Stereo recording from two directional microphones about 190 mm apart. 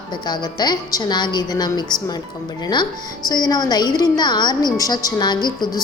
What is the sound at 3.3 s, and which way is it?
A woman's voice, 20° left (ahead or behind).